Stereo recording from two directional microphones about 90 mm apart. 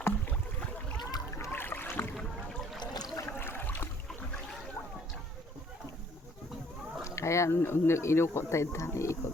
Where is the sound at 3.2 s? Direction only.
25° left (ahead or behind).